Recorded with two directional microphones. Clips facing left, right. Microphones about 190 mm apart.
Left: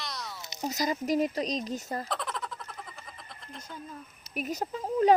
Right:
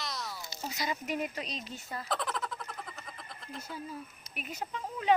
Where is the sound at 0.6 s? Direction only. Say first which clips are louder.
Left 7 dB; 40° left (ahead or behind).